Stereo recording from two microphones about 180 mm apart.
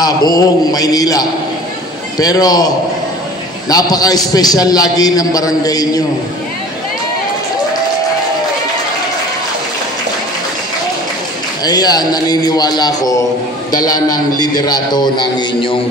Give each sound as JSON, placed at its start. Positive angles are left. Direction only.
{"t": 0.0, "sound": "a man's voice", "side_deg": 20}
{"t": 11.6, "sound": "a man's voice", "side_deg": 20}